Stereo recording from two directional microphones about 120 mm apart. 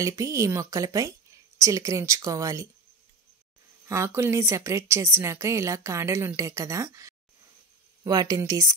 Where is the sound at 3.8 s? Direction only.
25° right (ahead or behind).